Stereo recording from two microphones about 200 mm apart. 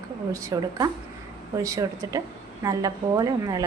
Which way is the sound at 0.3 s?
15° right (ahead or behind).